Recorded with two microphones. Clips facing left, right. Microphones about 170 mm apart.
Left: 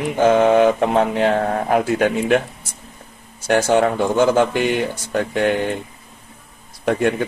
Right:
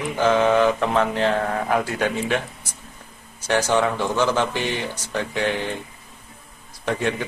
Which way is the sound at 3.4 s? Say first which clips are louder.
Left 4 dB; 55° left (ahead or behind).